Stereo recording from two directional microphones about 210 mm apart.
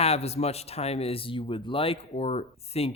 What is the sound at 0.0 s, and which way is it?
Speech, 30° left (ahead or behind).